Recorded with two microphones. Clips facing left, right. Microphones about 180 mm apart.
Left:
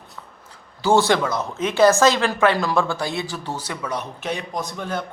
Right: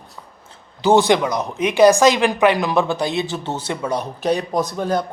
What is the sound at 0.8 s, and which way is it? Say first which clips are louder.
A woman's voice: right 3 dB; 20° right (ahead or behind).